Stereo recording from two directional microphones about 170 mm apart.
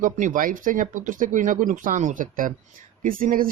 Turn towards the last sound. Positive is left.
turn(degrees=-55)  # may be behind; listen again after turning